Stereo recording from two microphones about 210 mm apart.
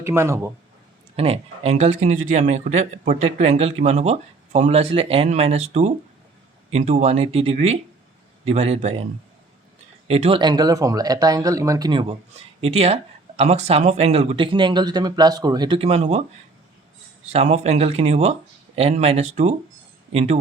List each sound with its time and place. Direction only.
0.0 s speech: 10° right (ahead or behind)
1.1 s speech: 30° right (ahead or behind)
10.1 s speech: 30° right (ahead or behind)
17.3 s speech: 30° right (ahead or behind)